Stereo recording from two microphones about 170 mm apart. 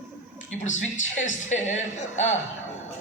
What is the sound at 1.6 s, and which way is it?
Speech, 45° left (ahead or behind).